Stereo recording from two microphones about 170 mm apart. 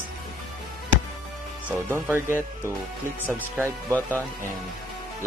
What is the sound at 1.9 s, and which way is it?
Speech, 15° right (ahead or behind).